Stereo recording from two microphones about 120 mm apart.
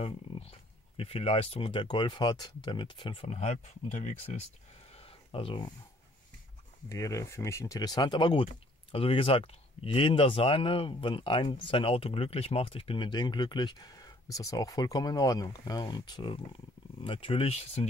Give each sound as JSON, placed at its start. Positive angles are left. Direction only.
{"t": 0.0, "sound": "speech", "side_deg": 50}
{"t": 3.3, "sound": "speech", "side_deg": 65}
{"t": 4.9, "sound": "a sound", "side_deg": 50}
{"t": 6.9, "sound": "speech", "side_deg": 25}
{"t": 8.9, "sound": "speech", "side_deg": 50}